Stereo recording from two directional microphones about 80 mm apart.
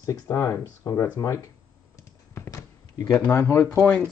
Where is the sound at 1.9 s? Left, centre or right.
Left.